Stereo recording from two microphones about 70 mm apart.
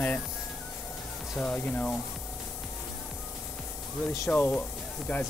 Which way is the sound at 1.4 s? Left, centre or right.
Centre.